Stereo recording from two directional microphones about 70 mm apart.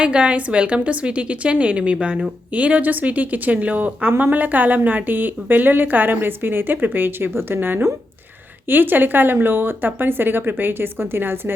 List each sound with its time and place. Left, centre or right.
0.0 s a woman's voice: centre; by 11.5 s right